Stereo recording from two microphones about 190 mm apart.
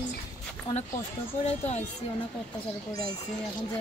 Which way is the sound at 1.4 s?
35° left (ahead or behind).